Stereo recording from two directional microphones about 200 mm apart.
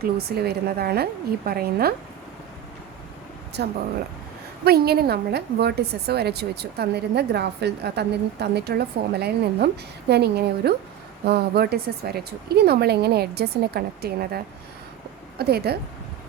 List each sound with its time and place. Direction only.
0.0 s speech: 50° right (ahead or behind)
3.6 s a woman's voice: 55° right (ahead or behind)